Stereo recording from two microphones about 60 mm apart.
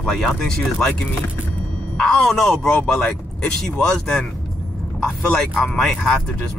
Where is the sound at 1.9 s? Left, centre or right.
Centre.